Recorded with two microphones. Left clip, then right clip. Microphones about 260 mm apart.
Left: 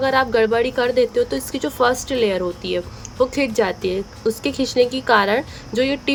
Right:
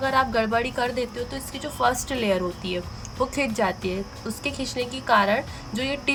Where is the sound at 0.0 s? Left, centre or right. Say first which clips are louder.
Left 5 dB; centre.